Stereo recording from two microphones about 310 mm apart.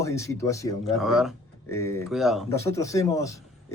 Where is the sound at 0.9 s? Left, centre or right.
Centre.